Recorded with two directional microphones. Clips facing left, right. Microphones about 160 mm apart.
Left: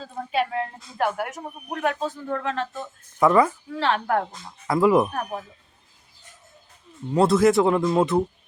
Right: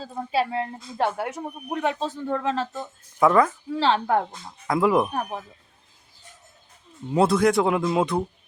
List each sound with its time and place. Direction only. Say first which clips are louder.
0.0 s a woman's voice: right 1 dB; 30° right (ahead or behind)
3.2 s speech: left 1 dB; centre (ahead or behind)
3.8 s a woman's voice: right 2 dB; 30° right (ahead or behind)
4.6 s speech: left 2 dB; centre (ahead or behind)
7.1 s speech: left 2 dB; centre (ahead or behind)